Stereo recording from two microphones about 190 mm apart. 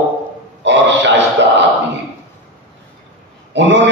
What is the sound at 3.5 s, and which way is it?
Speech, 70° right (ahead or behind).